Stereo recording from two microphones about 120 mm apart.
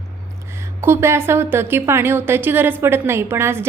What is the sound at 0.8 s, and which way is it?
A woman's voice, 20° right (ahead or behind).